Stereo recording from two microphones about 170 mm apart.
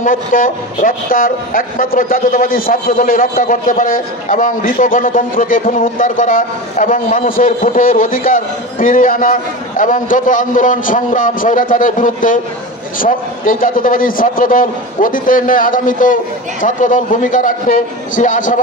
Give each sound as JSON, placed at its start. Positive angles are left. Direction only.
{"t": 0.0, "sound": "speech", "side_deg": 50}